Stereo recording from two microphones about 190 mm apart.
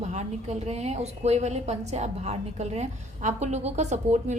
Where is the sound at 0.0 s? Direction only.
35° right (ahead or behind).